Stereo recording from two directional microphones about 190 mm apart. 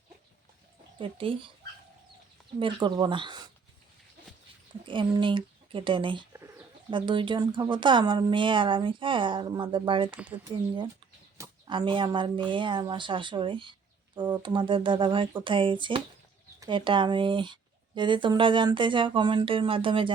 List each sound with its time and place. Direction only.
0.9 s speech: 30° right (ahead or behind)
2.6 s speech: 25° right (ahead or behind)
4.9 s speech: 25° right (ahead or behind)